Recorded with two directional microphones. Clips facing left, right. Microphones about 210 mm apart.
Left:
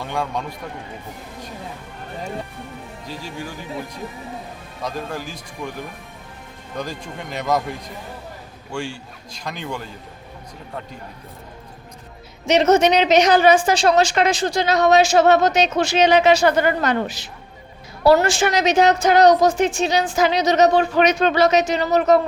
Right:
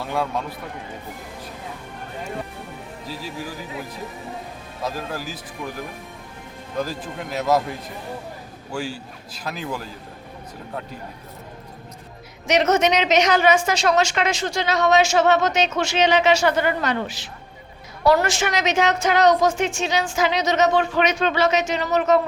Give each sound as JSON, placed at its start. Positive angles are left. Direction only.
{"t": 0.0, "sound": "a man's voice", "side_deg": -5}
{"t": 3.1, "sound": "a man's voice", "side_deg": 0}
{"t": 4.8, "sound": "a man's voice", "side_deg": -5}
{"t": 6.7, "sound": "a man's voice", "side_deg": -5}
{"t": 8.7, "sound": "a man's voice", "side_deg": -5}
{"t": 12.5, "sound": "a woman's voice", "side_deg": 30}
{"t": 18.0, "sound": "a woman's voice", "side_deg": 30}